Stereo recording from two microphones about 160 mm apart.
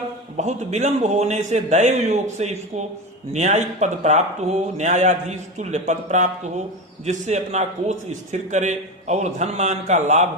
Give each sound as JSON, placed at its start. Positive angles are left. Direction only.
{"t": 0.3, "sound": "a man's voice", "side_deg": -45}